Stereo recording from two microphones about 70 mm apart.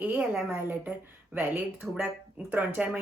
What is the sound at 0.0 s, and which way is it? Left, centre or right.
Speech, right.